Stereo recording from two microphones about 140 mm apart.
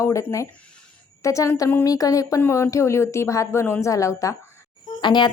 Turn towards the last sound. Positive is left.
turn(degrees=30)  # may be behind; listen again after turning